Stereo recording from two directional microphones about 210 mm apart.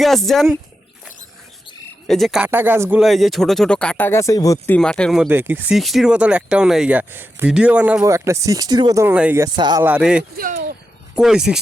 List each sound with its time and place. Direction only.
0.0 s speech: centre (ahead or behind)
2.0 s speech: centre (ahead or behind)
3.0 s speech: centre (ahead or behind); by 9.8 s 20° right (ahead or behind)
9.8 s speech: 5° right (ahead or behind)
10.3 s speech: 40° right (ahead or behind)
11.1 s speech: 5° right (ahead or behind)